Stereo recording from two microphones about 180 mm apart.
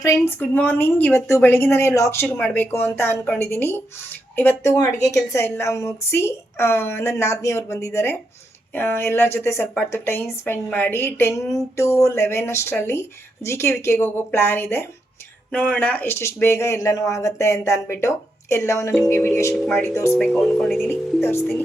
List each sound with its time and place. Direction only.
0.0 s a woman's voice: 15° left (ahead or behind)
19.9 s a woman's voice: 15° left (ahead or behind)
20.1 s speech: 5° left (ahead or behind)
20.8 s a woman's voice: 10° left (ahead or behind)